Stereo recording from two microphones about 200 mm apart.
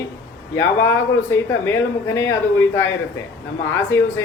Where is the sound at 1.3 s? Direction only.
10° left (ahead or behind).